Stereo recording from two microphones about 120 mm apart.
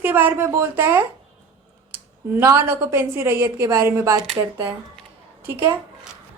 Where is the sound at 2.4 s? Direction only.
20° right (ahead or behind).